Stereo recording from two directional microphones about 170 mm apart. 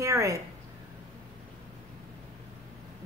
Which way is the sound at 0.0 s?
15° right (ahead or behind).